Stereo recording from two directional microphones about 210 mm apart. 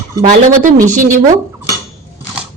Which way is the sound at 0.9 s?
35° right (ahead or behind).